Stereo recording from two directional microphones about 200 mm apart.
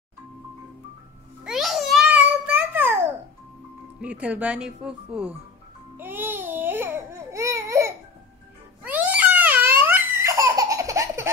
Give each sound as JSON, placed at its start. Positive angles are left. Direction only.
{"t": 1.4, "sound": "a sound", "side_deg": 0}
{"t": 4.0, "sound": "speech", "side_deg": -5}
{"t": 5.9, "sound": "babbling", "side_deg": -10}
{"t": 8.8, "sound": "baby laughter", "side_deg": -10}